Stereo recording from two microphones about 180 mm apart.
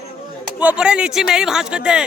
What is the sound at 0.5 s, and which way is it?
Speech, 5° right (ahead or behind).